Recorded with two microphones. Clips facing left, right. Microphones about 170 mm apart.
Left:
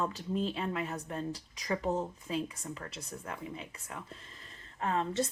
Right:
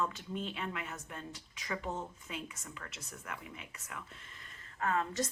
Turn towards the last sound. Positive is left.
turn(degrees=30)  # may be behind; listen again after turning